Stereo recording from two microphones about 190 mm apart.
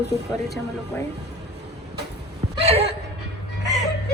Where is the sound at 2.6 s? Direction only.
30° right (ahead or behind).